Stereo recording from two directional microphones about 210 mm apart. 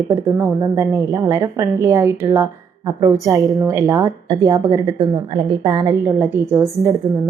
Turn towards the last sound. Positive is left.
turn(degrees=-15)  # may be behind; listen again after turning